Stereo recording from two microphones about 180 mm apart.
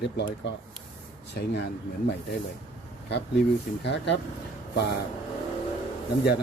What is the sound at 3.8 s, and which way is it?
Speech, 75° left (ahead or behind).